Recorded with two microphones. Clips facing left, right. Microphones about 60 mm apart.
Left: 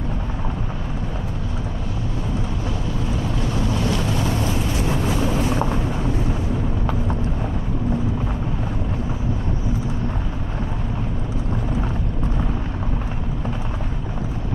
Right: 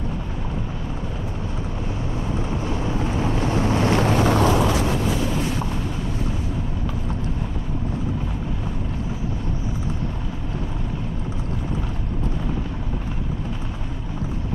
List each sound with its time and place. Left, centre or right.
3.2 s boat: right
4.4 s vehicle: right